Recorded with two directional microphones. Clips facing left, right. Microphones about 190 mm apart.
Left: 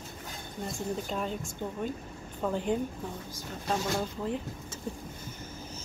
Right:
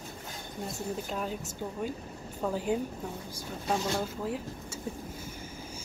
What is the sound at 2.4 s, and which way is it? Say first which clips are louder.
A woman's voice: even; 5° right (ahead or behind).